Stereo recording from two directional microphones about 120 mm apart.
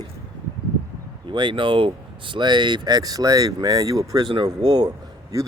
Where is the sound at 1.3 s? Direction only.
40° right (ahead or behind).